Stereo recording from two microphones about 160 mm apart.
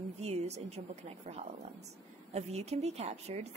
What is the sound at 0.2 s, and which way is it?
A woman's voice, 40° right (ahead or behind).